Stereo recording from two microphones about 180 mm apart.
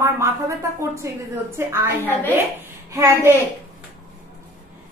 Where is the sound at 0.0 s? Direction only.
15° right (ahead or behind).